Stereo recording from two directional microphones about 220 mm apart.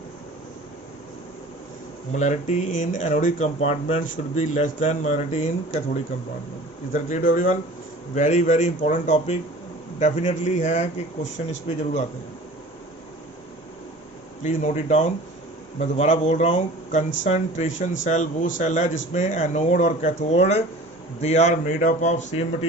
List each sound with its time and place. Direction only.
2.1 s speech: 35° left (ahead or behind)
14.4 s speech: 35° left (ahead or behind)